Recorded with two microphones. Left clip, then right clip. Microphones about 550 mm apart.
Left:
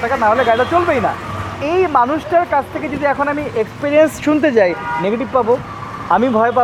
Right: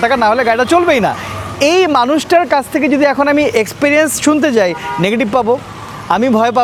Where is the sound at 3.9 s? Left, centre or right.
Right.